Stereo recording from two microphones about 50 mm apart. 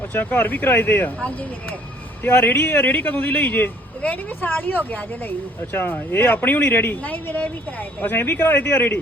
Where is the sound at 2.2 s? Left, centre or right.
Left.